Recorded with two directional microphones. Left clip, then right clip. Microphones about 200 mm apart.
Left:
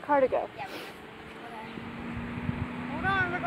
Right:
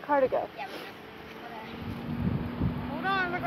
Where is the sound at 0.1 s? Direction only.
25° left (ahead or behind).